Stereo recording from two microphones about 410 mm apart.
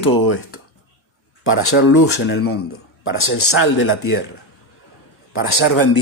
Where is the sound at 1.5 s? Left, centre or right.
Left.